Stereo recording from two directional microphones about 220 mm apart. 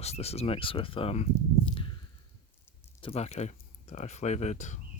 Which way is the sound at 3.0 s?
30° left (ahead or behind).